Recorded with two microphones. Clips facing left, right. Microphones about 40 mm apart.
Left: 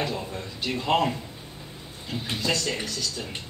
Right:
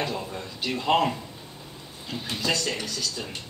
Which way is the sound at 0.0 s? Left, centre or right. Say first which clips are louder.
Even; centre.